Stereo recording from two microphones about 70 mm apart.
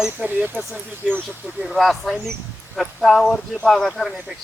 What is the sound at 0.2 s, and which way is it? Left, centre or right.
Speech, centre.